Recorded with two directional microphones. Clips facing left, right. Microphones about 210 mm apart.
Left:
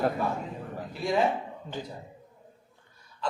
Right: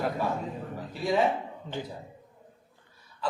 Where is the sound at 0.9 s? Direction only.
Centre (ahead or behind).